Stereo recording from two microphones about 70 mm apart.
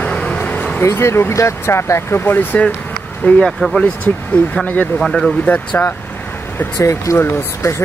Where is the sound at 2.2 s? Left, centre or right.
Left.